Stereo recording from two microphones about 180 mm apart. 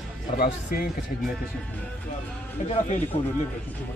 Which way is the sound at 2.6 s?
40° left (ahead or behind).